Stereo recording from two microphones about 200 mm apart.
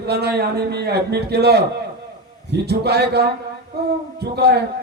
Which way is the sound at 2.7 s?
55° right (ahead or behind).